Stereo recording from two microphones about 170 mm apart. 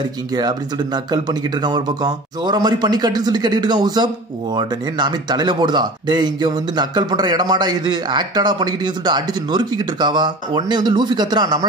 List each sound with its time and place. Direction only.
0.4 s speech: 25° right (ahead or behind)